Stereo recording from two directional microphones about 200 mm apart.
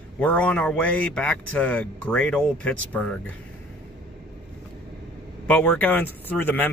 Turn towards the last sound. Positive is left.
turn(degrees=10)  # may be behind; listen again after turning